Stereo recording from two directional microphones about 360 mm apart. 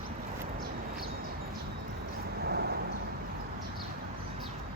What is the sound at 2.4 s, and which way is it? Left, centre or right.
Vehicle, right.